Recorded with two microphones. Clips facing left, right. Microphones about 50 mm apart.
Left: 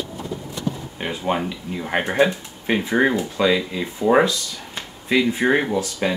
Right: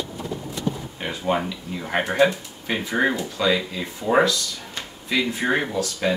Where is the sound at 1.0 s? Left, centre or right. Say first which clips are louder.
Left 1 dB; centre.